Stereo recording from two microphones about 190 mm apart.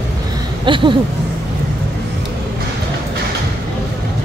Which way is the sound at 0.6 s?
25° right (ahead or behind).